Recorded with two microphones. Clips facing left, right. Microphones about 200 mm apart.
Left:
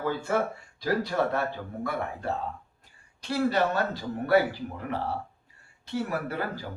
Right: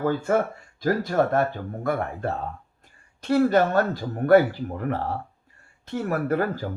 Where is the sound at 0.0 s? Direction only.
50° right (ahead or behind).